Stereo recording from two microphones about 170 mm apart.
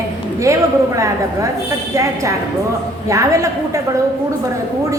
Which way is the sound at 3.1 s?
20° right (ahead or behind).